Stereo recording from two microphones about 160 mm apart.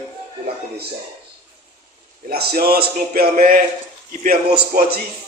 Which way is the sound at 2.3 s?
70° right (ahead or behind).